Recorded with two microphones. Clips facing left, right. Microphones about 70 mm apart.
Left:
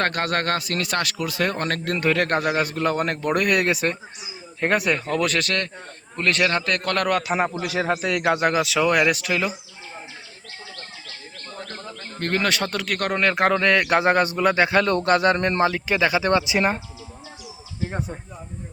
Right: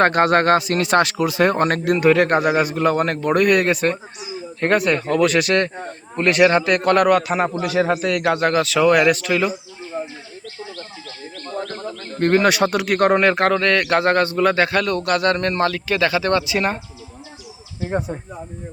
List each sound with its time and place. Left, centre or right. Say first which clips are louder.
0.0 s a man's voice: right 8 dB; right; by 5.4 s centre
5.4 s a man's voice: right 7 dB; right
7.2 s a man's voice: right 3 dB; centre
12.2 s speech: right 8 dB; centre
13.2 s a man's voice: right 3 dB; centre
14.7 s speech: left 1 dB; left
17.8 s speech: right 6 dB; centre